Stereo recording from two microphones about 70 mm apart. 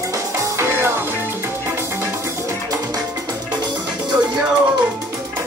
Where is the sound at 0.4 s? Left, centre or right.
Right.